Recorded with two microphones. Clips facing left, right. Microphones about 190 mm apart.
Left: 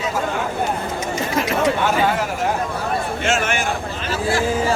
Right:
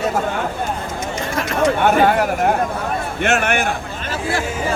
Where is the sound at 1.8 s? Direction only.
55° right (ahead or behind).